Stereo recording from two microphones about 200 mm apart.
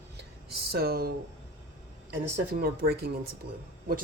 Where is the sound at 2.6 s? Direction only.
50° right (ahead or behind).